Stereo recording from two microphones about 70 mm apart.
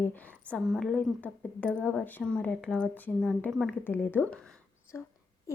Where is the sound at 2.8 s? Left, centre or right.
Left.